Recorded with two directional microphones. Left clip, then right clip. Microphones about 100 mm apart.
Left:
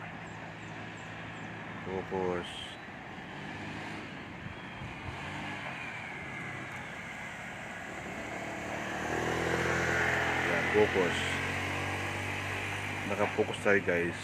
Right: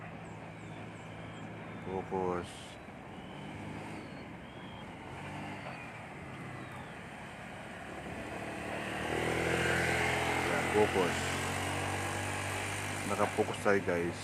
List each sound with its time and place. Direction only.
2.1 s speech: 10° left (ahead or behind)
8.6 s vehicle: 25° left (ahead or behind)
9.6 s vehicle: 10° left (ahead or behind)
9.8 s vehicle: centre (ahead or behind); by 13.1 s 20° right (ahead or behind)
13.2 s speech: 15° right (ahead or behind)
13.7 s speech: 10° left (ahead or behind)